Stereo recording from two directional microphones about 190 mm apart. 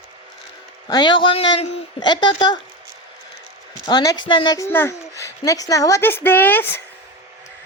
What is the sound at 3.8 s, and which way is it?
Speech, 20° left (ahead or behind).